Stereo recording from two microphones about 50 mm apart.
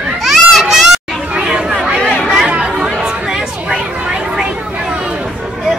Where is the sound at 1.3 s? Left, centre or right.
Centre.